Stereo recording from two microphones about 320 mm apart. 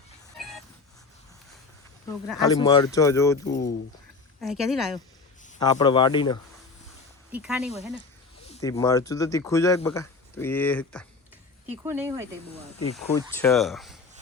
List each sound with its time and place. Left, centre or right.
2.5 s speech: centre
3.5 s speech: left
4.4 s speech: centre
5.5 s speech: centre
7.3 s speech: centre
8.4 s speech: centre
11.8 s speech: centre
13.0 s speech: centre